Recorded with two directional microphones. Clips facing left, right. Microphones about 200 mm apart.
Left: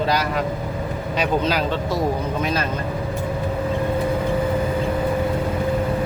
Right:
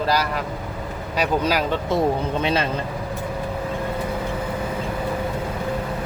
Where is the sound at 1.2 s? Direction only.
10° right (ahead or behind).